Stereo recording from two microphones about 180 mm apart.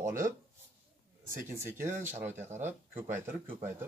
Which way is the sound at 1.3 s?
10° right (ahead or behind).